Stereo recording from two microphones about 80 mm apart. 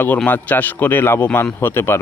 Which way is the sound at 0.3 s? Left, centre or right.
Left.